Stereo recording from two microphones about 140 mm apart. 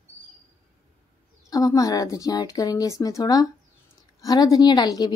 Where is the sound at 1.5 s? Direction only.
25° left (ahead or behind).